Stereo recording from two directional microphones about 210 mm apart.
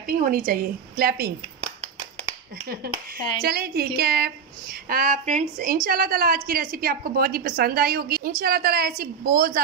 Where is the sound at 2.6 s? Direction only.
45° right (ahead or behind).